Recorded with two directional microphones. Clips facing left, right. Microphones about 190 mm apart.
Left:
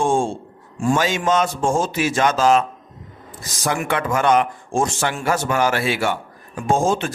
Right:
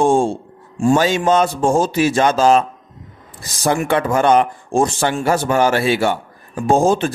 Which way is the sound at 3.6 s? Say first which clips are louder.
Right 5 dB; 30° right (ahead or behind).